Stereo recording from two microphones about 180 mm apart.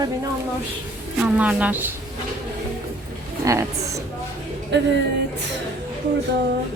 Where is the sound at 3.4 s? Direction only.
15° right (ahead or behind).